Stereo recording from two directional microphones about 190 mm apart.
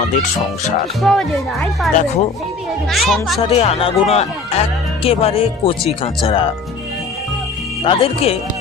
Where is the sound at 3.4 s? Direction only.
30° left (ahead or behind).